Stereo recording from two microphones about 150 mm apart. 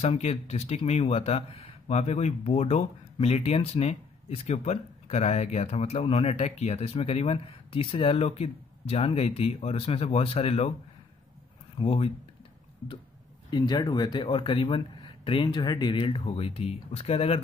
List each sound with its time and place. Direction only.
0.0 s speech: 45° left (ahead or behind)
11.8 s speech: 40° left (ahead or behind)
13.5 s speech: 30° left (ahead or behind)